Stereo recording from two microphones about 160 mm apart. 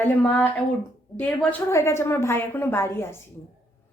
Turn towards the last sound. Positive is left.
turn(degrees=15)  # may be behind; listen again after turning